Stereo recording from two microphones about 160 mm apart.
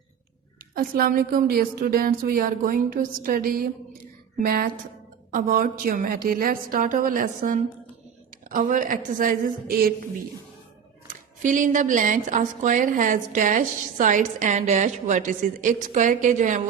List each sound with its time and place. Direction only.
0.7 s a woman's voice: 65° right (ahead or behind)
11.4 s a woman's voice: 55° right (ahead or behind)